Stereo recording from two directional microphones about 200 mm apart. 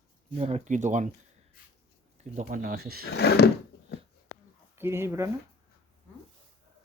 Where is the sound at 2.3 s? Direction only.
45° right (ahead or behind).